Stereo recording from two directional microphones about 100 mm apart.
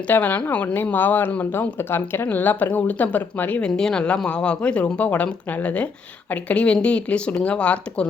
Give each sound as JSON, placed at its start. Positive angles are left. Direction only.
{"t": 0.1, "sound": "speech", "side_deg": 15}
{"t": 3.7, "sound": "speech", "side_deg": 5}